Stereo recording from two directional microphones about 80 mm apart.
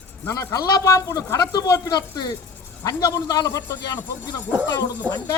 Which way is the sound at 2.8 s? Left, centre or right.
Left.